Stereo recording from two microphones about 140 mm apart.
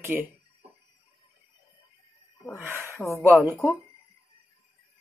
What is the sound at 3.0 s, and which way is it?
Speech, 15° left (ahead or behind).